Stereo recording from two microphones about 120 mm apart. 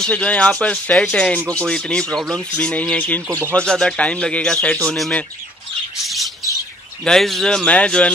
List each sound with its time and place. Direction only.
0.0 s speech: 10° left (ahead or behind)
3.3 s speech: 20° right (ahead or behind)
3.5 s speech: 5° left (ahead or behind)
6.0 s squawk: centre (ahead or behind)
7.1 s speech: centre (ahead or behind)